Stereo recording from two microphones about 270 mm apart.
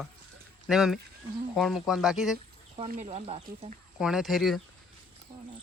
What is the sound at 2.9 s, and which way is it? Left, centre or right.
Speech, right.